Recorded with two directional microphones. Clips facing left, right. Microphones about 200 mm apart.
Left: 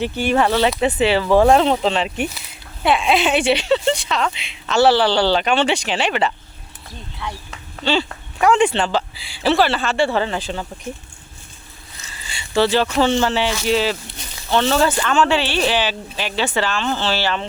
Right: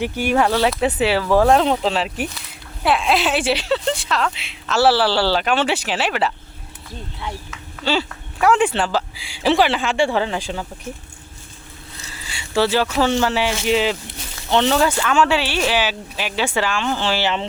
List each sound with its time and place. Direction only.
0.0 s speech: 10° right (ahead or behind)
7.9 s speech: 5° right (ahead or behind)
12.1 s speech: 10° right (ahead or behind)
13.5 s speech: 20° right (ahead or behind)